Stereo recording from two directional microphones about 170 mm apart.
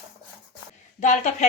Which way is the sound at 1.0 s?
45° left (ahead or behind).